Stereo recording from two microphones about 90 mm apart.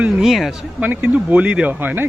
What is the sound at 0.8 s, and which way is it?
Speech, 15° right (ahead or behind).